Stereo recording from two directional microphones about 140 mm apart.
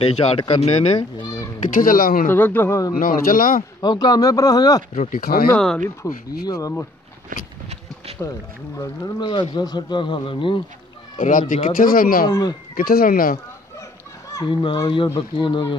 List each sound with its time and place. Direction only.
0.0 s speech: 45° left (ahead or behind)
0.9 s a child's voice: 30° left (ahead or behind)
1.6 s speech: 80° left
2.3 s a man's voice: 15° left (ahead or behind)
3.0 s speech: 90° left
3.8 s speech: 30° left (ahead or behind)
4.9 s speech: 70° left (ahead or behind); by 5.5 s 90° left
5.5 s speech: 5° left (ahead or behind)
6.0 s speech: 25° left (ahead or behind)
8.7 s speech: 25° left (ahead or behind)
11.1 s speech: 70° left (ahead or behind); by 12.3 s 90° left
12.3 s speech: 30° left (ahead or behind)
12.7 s speech: 90° left
14.3 s speech: 30° left (ahead or behind)